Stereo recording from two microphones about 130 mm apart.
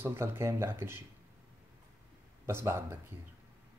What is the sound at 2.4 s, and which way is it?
Speech, 20° right (ahead or behind).